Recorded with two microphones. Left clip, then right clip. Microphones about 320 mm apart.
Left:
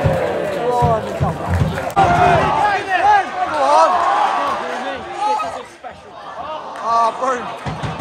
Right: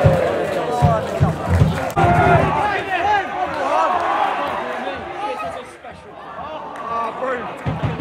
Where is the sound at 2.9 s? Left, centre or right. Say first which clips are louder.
Left 5 dB; left.